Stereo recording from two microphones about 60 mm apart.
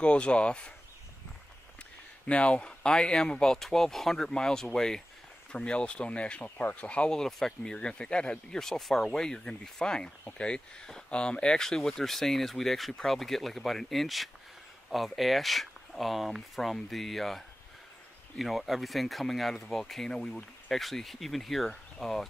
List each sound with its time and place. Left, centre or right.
0.0 s speech: centre
2.2 s speech: left
7.1 s speech: centre
18.4 s speech: centre
20.7 s speech: centre